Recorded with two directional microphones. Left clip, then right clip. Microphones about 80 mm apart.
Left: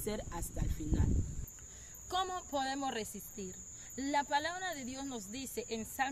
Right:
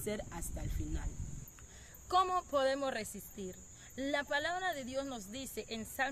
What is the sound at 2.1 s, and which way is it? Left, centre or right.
Speech, right.